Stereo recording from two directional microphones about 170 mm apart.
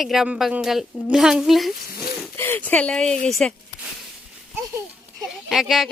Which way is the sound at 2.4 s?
10° left (ahead or behind).